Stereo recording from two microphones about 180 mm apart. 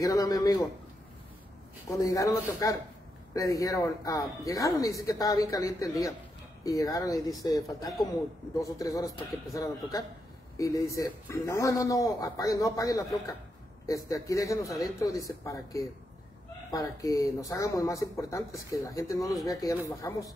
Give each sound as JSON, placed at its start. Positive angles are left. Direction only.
{"t": 0.0, "sound": "speech", "side_deg": 20}
{"t": 1.9, "sound": "a man's voice", "side_deg": 20}